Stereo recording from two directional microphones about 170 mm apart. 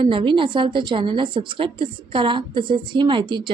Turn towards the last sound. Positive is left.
turn(degrees=-25)  # may be behind; listen again after turning